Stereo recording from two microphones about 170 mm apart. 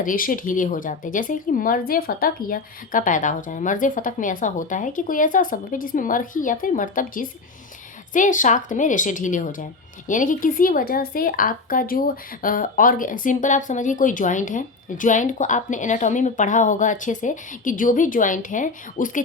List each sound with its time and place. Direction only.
0.0 s a woman's voice: 55° left (ahead or behind)